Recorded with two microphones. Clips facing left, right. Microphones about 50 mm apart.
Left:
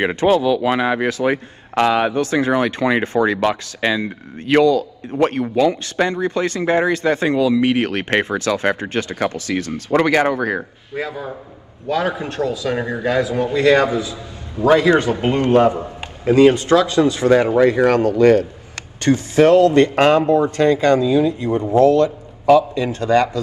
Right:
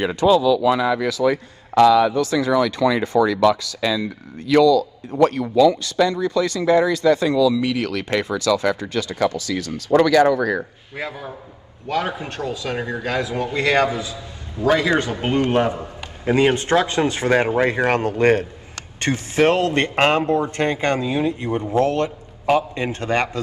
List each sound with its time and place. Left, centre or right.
0.0 s a man's voice: left
14.7 s speech: left
16.3 s a man's voice: right